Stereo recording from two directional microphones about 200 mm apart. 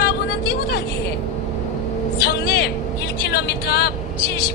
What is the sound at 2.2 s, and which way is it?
Speech, 50° left (ahead or behind).